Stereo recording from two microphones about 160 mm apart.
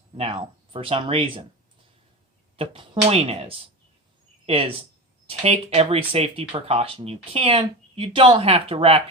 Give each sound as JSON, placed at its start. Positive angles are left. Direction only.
{"t": 0.2, "sound": "speech", "side_deg": -35}
{"t": 2.6, "sound": "speech", "side_deg": -35}